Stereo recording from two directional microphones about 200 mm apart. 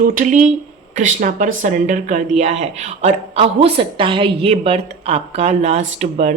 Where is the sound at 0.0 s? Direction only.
40° right (ahead or behind).